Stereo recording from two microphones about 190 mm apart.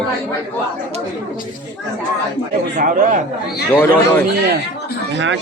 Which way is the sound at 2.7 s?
45° right (ahead or behind).